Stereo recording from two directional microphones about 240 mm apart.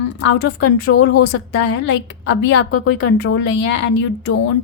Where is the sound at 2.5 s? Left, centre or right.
Left.